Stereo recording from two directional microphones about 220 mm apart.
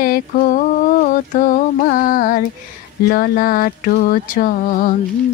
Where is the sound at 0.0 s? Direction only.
40° left (ahead or behind).